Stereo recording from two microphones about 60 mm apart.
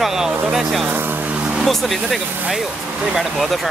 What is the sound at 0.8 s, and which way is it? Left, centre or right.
Speech, right.